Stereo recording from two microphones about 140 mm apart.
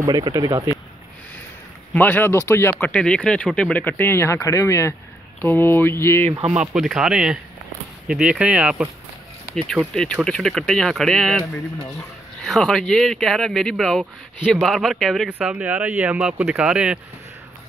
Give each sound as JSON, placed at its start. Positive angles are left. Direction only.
{"t": 0.0, "sound": "speech", "side_deg": -30}
{"t": 2.0, "sound": "speech", "side_deg": 15}
{"t": 6.6, "sound": "speech", "side_deg": -5}
{"t": 9.6, "sound": "speech", "side_deg": 5}
{"t": 12.4, "sound": "speech", "side_deg": 0}
{"t": 15.2, "sound": "speech", "side_deg": -10}